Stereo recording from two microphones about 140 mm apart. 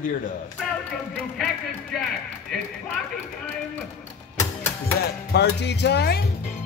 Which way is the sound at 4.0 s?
15° left (ahead or behind).